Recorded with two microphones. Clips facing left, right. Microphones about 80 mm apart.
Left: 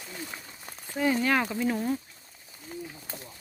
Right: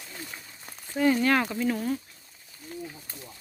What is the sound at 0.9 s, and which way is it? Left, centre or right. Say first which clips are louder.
Speech: right 2 dB; centre.